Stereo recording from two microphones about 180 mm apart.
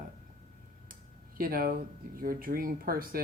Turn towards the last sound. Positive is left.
turn(degrees=-55)  # may be behind; listen again after turning